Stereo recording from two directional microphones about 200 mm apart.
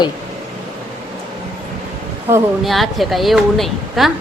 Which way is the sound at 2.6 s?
Centre (ahead or behind).